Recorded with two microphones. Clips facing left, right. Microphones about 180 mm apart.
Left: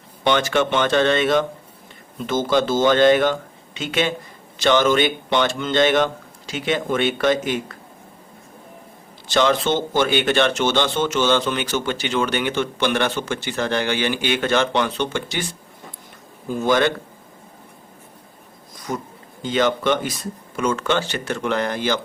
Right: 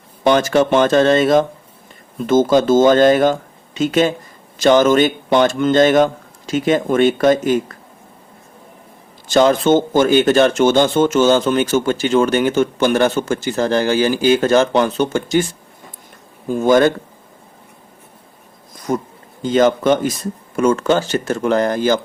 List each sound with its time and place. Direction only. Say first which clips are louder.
0.3 s speech: right 6 dB; 40° right (ahead or behind)
9.2 s speech: right 6 dB; 45° right (ahead or behind)
16.5 s speech: right 6 dB; 50° right (ahead or behind)
18.9 s speech: right 7 dB; 50° right (ahead or behind)